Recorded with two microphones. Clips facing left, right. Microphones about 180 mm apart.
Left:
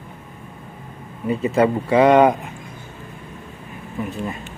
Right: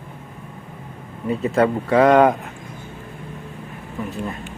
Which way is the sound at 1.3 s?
Centre (ahead or behind).